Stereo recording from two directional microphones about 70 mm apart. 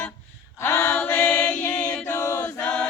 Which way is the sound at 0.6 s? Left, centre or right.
Left.